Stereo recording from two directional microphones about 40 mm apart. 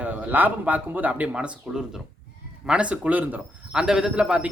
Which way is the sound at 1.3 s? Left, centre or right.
Right.